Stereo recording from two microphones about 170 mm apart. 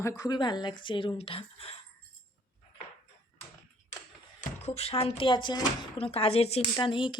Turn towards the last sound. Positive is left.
turn(degrees=30)  # may be behind; listen again after turning